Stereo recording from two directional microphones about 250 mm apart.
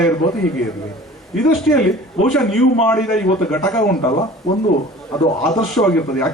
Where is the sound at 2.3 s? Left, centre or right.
Centre.